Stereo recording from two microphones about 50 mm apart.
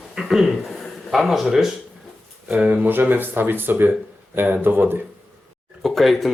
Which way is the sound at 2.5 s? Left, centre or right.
Right.